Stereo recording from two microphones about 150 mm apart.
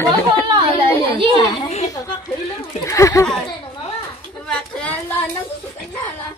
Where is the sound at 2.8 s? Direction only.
20° left (ahead or behind).